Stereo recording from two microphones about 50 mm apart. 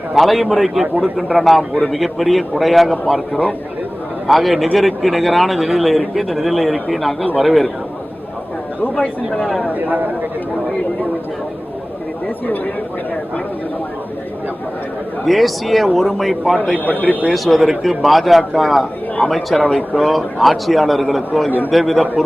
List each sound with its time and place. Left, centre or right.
0.1 s speech: centre
4.3 s speech: centre
9.4 s speech: centre
9.7 s speech: right
15.3 s speech: centre
16.8 s speech: left
17.3 s speech: centre